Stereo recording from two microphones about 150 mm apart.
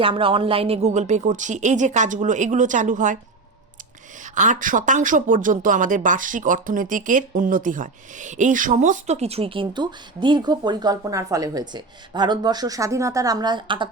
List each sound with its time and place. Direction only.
0.0 s speech: 35° right (ahead or behind); by 3.2 s 60° right (ahead or behind)
4.2 s speech: 55° right (ahead or behind); by 13.9 s 35° right (ahead or behind)